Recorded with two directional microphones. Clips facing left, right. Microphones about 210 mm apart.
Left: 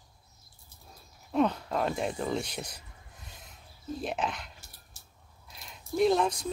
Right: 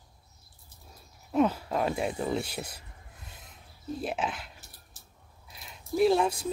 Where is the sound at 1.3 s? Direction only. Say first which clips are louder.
Right 1 dB; 5° right (ahead or behind).